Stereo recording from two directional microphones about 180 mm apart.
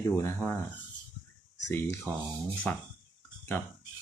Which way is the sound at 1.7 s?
10° left (ahead or behind).